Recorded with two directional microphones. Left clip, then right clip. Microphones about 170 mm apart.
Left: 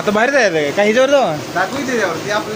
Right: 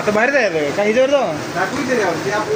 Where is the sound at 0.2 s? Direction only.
30° left (ahead or behind).